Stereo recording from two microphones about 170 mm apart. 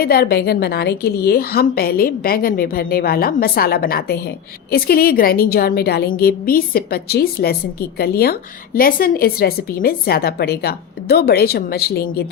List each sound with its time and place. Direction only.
0.0 s a woman's voice: 65° left (ahead or behind)